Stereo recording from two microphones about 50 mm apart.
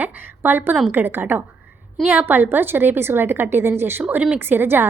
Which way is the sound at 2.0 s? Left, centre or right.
Right.